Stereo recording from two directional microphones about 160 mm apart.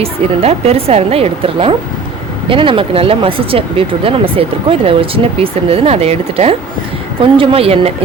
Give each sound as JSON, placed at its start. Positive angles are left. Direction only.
{"t": 0.0, "sound": "speech", "side_deg": -40}